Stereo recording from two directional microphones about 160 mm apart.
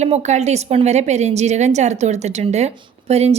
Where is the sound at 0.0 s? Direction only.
45° right (ahead or behind).